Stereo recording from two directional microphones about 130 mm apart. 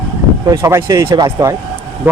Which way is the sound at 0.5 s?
20° right (ahead or behind).